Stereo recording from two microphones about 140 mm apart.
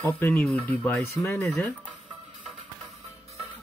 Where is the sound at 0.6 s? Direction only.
20° left (ahead or behind).